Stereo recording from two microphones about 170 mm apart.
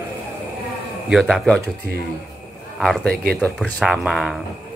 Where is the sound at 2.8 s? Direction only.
Centre (ahead or behind).